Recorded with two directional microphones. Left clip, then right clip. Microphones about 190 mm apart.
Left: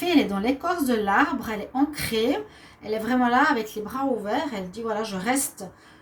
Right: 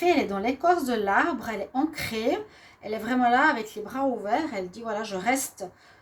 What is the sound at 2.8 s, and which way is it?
A woman's voice, 50° right (ahead or behind).